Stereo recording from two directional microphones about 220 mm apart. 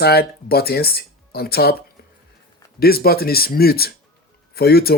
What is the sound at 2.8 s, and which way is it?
Speech, 45° left (ahead or behind).